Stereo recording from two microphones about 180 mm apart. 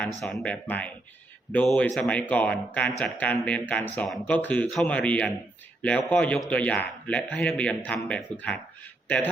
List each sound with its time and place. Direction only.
0.2 s a man's voice: 5° left (ahead or behind)